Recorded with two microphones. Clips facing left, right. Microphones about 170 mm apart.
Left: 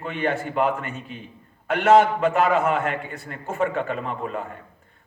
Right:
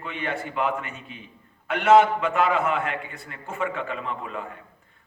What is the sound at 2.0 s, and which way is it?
A man's voice, 40° left (ahead or behind).